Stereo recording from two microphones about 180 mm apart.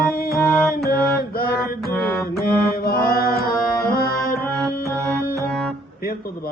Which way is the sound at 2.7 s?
55° left (ahead or behind).